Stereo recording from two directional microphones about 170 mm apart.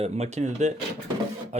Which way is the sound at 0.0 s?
40° right (ahead or behind).